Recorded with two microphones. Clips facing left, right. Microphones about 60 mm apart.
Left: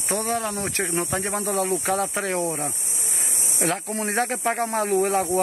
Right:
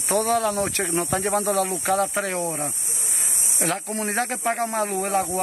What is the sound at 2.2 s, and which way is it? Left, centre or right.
Speech, left.